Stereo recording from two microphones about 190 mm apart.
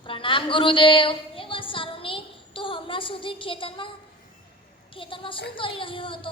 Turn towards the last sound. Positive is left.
turn(degrees=25)  # may be behind; listen again after turning